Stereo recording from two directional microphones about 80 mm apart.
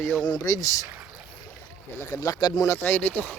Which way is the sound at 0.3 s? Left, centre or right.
Left.